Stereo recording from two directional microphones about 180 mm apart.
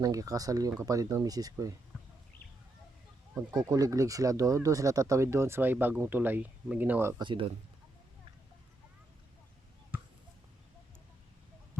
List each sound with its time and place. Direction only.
0.0 s speech: 20° right (ahead or behind)
3.3 s speech: 15° right (ahead or behind)
7.2 s speech: 25° right (ahead or behind)